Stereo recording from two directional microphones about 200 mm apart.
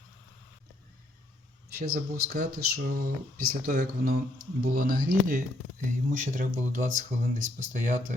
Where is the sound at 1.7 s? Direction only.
50° right (ahead or behind).